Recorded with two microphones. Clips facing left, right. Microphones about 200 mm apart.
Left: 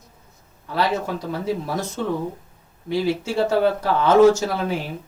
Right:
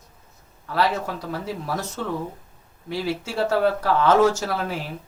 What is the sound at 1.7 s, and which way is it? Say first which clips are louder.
Speech: left 2 dB; 25° left (ahead or behind).